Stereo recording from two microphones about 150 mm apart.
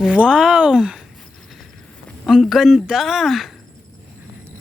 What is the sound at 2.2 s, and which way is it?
Speech, centre (ahead or behind).